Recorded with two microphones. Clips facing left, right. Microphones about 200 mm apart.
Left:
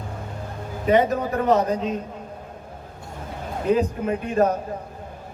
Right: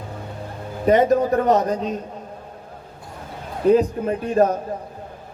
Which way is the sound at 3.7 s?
35° right (ahead or behind).